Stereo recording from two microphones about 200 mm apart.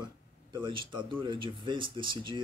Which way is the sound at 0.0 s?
25° right (ahead or behind).